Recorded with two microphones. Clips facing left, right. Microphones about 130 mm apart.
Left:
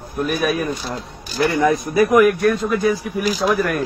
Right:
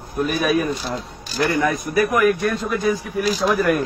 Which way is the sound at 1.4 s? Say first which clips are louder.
Left 3 dB; 25° left (ahead or behind).